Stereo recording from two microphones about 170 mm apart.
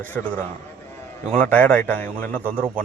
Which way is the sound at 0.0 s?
10° left (ahead or behind).